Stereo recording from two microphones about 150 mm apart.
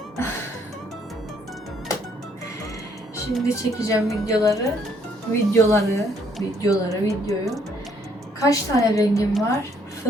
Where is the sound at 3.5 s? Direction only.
20° left (ahead or behind).